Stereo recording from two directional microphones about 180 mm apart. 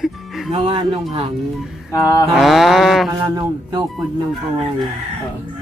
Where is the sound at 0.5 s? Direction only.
35° right (ahead or behind).